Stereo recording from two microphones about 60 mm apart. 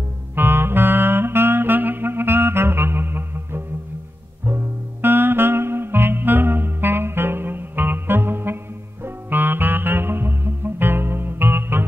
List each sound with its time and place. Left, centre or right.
0.4 s saxophone: right
4.5 s music: right